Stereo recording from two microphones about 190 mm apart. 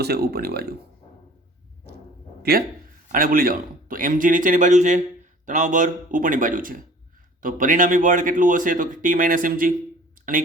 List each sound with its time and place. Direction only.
0.0 s speech: 55° right (ahead or behind)
2.4 s a man's voice: 55° right (ahead or behind)